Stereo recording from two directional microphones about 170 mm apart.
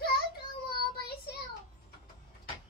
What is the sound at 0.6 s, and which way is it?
Child singing, 65° left (ahead or behind).